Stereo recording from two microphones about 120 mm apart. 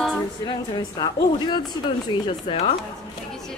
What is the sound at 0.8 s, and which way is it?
Speech, 35° left (ahead or behind).